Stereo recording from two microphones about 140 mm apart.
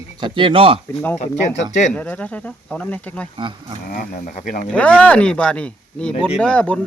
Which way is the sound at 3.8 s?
70° left (ahead or behind).